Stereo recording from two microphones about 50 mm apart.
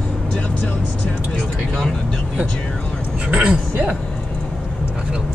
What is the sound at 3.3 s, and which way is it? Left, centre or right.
Speech, right.